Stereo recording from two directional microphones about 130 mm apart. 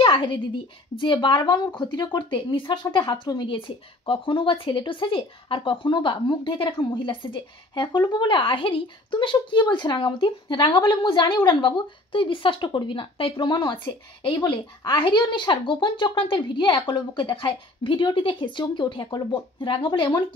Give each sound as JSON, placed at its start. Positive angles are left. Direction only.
{"t": 0.0, "sound": "a woman's voice", "side_deg": 40}